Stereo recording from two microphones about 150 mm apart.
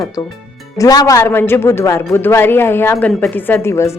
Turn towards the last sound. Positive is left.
turn(degrees=20)  # may be behind; listen again after turning